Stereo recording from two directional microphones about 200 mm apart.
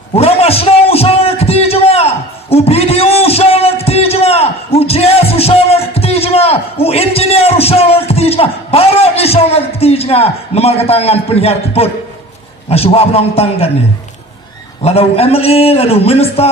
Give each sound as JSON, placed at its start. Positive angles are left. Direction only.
{"t": 0.1, "sound": "a sound", "side_deg": 30}
{"t": 12.7, "sound": "a man's voice", "side_deg": 30}
{"t": 14.8, "sound": "a man's voice", "side_deg": 30}